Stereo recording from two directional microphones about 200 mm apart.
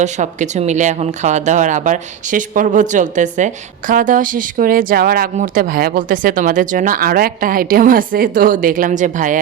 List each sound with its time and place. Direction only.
0.0 s speech: 35° right (ahead or behind)